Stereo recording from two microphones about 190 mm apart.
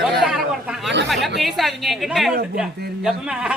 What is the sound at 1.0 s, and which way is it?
Speech, centre (ahead or behind).